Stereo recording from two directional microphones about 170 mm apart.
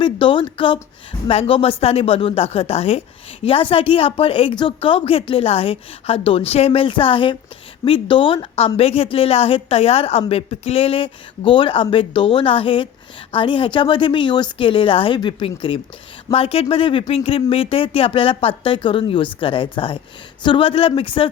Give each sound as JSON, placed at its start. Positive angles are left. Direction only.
{"t": 0.0, "sound": "a woman's voice", "side_deg": 30}